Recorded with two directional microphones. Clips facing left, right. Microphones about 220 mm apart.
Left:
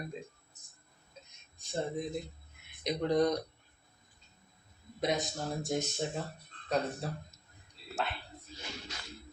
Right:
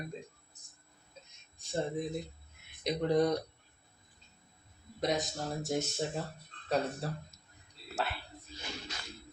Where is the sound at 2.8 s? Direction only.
5° right (ahead or behind).